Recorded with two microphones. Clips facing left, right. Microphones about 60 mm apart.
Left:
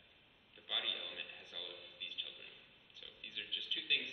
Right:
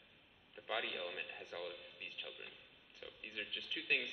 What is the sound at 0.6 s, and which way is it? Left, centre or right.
A man's voice, right.